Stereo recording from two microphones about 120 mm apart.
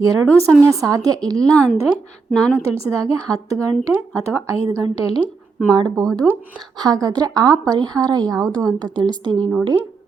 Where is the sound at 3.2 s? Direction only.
30° right (ahead or behind).